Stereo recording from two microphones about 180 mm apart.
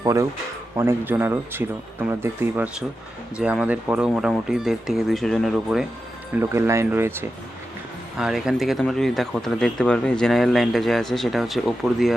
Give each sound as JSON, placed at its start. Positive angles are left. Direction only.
{"t": 0.0, "sound": "speech", "side_deg": -15}
{"t": 6.3, "sound": "speech", "side_deg": -15}